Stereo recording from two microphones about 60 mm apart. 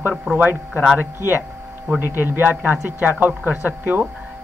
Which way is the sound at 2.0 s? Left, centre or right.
Right.